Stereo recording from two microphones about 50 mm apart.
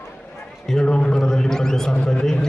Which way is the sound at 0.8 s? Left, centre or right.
Centre.